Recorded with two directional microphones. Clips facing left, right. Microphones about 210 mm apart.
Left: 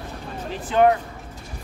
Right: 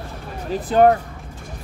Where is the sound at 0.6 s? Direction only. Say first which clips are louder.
Right 3 dB; 40° right (ahead or behind).